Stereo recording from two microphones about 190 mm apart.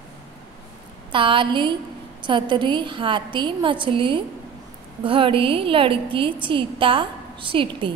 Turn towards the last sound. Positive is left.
turn(degrees=-25)  # may be behind; listen again after turning